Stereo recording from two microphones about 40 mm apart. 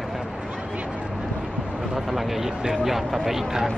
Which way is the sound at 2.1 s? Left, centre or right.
Centre.